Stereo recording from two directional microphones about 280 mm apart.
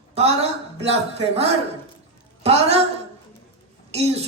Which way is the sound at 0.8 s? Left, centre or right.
Right.